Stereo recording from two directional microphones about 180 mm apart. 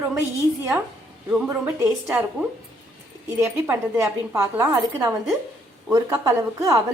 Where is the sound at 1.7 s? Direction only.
10° right (ahead or behind).